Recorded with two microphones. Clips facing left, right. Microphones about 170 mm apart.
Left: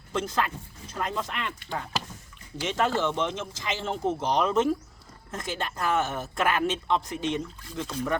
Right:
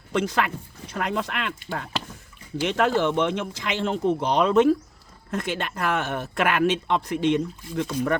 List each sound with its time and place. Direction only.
0.1 s speech: 75° right (ahead or behind)